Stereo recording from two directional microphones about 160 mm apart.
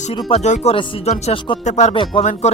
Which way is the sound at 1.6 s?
45° left (ahead or behind).